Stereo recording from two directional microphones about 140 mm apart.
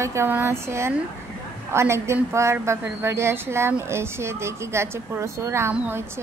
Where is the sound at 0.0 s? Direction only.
20° right (ahead or behind).